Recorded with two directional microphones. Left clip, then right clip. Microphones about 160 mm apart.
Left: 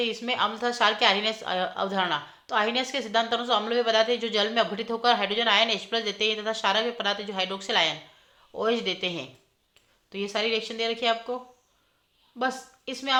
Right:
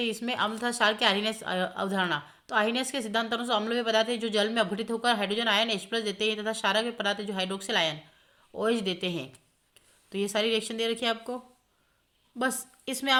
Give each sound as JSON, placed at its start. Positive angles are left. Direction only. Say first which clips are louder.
{"t": 0.0, "sound": "a woman's voice", "louder": "left 3 dB", "side_deg": -35}
{"t": 12.4, "sound": "a woman's voice", "louder": "left 2 dB", "side_deg": -45}